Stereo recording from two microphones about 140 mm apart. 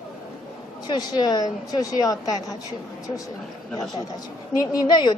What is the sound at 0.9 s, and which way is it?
Speech, 30° left (ahead or behind).